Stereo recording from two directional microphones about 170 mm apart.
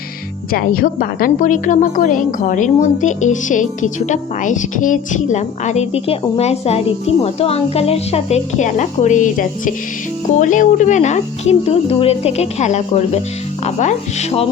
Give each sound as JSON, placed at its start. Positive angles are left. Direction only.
{"t": 0.5, "sound": "a woman's voice", "side_deg": 60}